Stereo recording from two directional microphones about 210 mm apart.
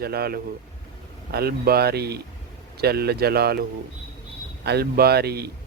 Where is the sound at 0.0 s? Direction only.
45° right (ahead or behind).